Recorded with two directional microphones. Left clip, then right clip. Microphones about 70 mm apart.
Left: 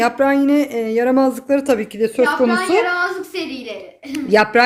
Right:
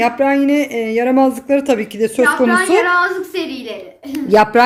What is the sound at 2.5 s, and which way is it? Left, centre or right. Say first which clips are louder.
A child's voice: right 4 dB; left.